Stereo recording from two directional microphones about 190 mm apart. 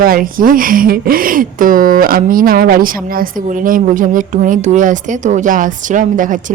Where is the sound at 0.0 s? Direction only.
50° right (ahead or behind).